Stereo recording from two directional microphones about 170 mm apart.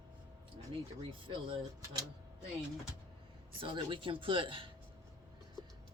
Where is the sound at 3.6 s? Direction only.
30° right (ahead or behind).